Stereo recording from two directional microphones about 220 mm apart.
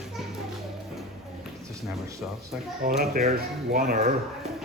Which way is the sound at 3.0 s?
45° right (ahead or behind).